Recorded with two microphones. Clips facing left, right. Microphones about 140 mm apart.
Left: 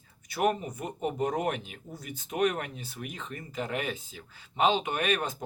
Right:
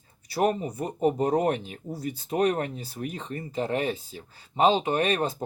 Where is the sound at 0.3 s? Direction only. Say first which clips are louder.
Right 3 dB; 35° right (ahead or behind).